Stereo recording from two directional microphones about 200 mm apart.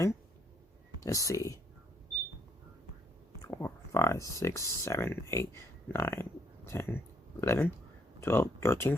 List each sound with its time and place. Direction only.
1.0 s speech: 15° left (ahead or behind)
3.4 s speech: 15° left (ahead or behind)